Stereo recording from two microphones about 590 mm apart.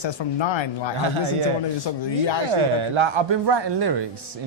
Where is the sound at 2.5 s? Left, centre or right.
Right.